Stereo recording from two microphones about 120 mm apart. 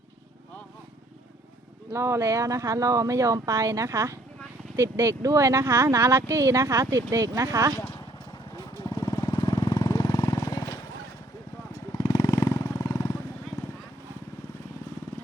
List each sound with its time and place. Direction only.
1.9 s speech: 25° right (ahead or behind)
8.5 s vehicle: 35° left (ahead or behind)
11.9 s jackhammer: 30° left (ahead or behind)